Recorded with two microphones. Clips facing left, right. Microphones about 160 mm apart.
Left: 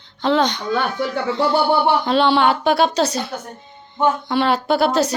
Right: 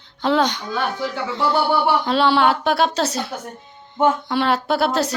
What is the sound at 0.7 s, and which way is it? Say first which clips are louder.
Speech: left 3 dB; 60° left (ahead or behind).